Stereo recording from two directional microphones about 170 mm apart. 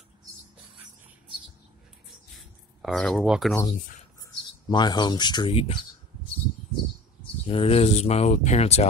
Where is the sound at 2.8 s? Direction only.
Centre (ahead or behind).